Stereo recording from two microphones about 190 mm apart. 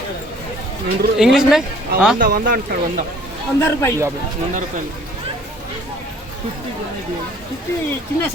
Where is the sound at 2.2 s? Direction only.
45° right (ahead or behind).